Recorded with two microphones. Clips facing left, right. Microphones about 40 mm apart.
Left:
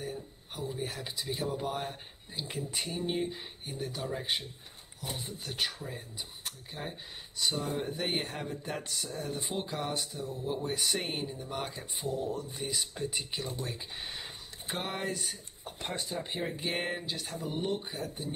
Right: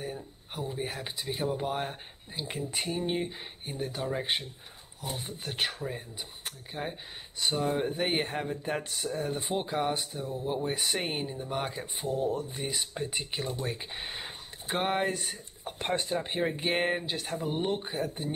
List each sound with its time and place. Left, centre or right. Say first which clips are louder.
0.0 s speech: right 1 dB; centre
5.0 s speech: right 2 dB; right
12.0 s speech: right 4 dB; right